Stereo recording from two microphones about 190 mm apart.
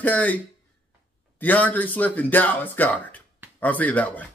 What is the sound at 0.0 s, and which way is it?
Speech, 10° left (ahead or behind).